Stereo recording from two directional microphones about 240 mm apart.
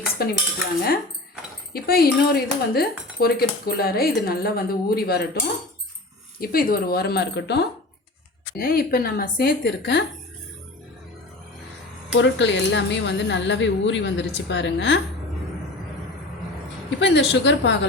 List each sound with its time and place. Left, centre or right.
0.2 s speech: left
1.7 s speech: left
6.4 s speech: left
12.1 s a woman's voice: left
17.0 s a woman's voice: left